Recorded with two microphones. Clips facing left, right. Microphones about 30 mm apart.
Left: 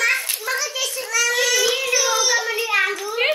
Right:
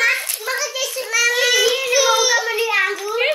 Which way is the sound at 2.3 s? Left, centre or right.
Centre.